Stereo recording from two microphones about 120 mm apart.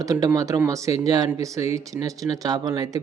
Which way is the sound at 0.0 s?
30° right (ahead or behind).